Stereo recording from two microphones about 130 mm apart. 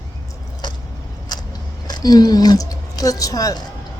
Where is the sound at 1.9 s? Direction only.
30° left (ahead or behind).